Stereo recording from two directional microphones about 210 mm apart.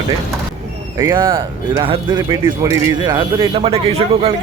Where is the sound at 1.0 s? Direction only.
20° right (ahead or behind).